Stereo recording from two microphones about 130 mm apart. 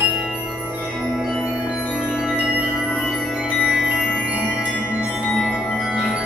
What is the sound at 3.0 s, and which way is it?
Jingle bell, centre (ahead or behind).